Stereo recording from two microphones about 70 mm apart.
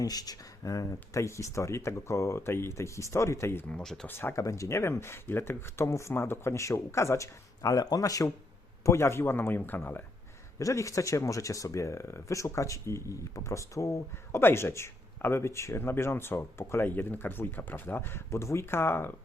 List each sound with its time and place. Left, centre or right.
0.0 s speech: left
3.7 s speech: centre
4.0 s speech: left
4.4 s speech: left
8.8 s speech: left
10.6 s speech: left